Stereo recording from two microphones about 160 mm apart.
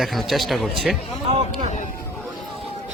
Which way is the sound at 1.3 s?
40° right (ahead or behind).